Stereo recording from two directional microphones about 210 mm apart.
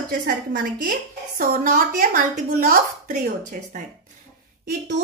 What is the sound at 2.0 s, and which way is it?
Speech, 40° right (ahead or behind).